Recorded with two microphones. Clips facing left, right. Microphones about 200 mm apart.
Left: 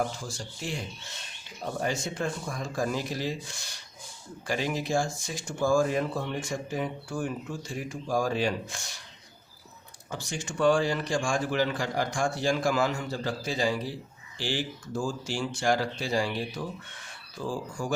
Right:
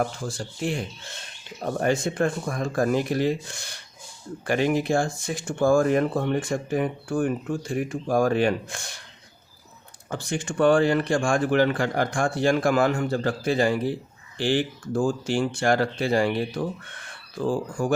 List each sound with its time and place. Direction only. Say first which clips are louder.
0.2 s speech: right 8 dB; 55° right (ahead or behind)
10.1 s speech: right 7 dB; 55° right (ahead or behind)